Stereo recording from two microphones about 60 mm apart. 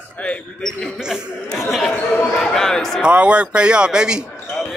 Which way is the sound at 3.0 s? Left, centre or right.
Centre.